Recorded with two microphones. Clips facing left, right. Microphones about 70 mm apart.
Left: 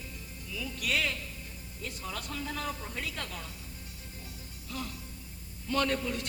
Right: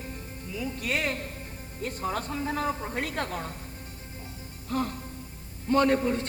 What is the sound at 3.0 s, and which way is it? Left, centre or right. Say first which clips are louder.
Speech: right 8 dB; right.